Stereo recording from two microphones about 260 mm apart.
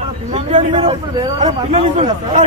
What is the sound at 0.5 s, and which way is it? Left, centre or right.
A man's voice, right.